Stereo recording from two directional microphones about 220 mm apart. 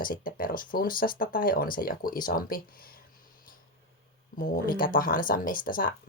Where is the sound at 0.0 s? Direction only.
40° left (ahead or behind).